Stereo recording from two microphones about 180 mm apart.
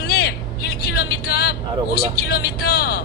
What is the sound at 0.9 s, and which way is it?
Vehicle, 60° left (ahead or behind).